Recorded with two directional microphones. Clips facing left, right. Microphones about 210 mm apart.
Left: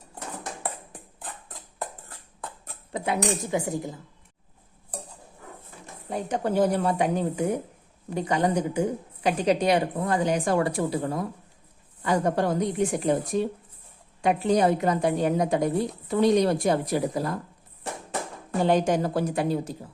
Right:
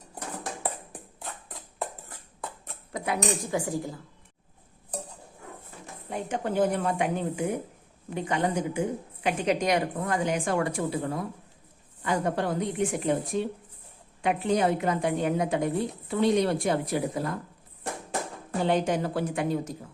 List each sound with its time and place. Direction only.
0.6 s a sound: 5° right (ahead or behind)
2.9 s a woman's voice: 25° left (ahead or behind)
6.1 s a woman's voice: 35° left (ahead or behind)
14.2 s a woman's voice: 35° left (ahead or behind)
18.6 s a woman's voice: 40° left (ahead or behind)